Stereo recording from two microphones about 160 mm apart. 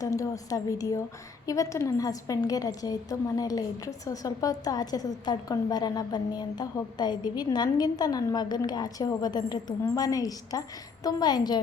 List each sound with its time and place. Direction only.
0.0 s a woman's voice: 20° left (ahead or behind)